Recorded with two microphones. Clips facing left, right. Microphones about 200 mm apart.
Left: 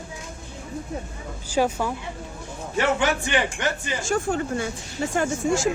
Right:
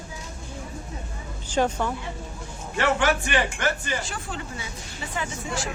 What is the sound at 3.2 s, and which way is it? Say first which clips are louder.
Speech: left 1 dB; 15° left (ahead or behind).